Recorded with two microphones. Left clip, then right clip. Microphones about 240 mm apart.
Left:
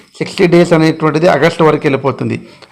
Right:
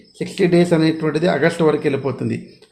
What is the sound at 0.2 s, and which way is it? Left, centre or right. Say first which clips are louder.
Speech: left 7 dB; centre.